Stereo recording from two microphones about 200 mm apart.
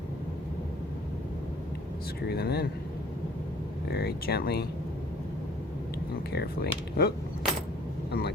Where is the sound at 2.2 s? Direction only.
50° left (ahead or behind).